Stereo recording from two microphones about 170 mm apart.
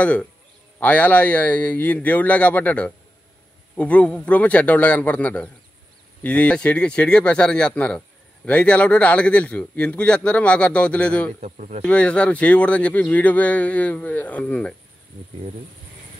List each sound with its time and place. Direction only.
0.0 s speech: 10° left (ahead or behind)
11.4 s a man's voice: 45° right (ahead or behind)
11.8 s speech: 5° left (ahead or behind)